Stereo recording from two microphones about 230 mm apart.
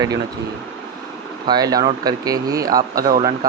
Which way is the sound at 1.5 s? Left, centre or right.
Centre.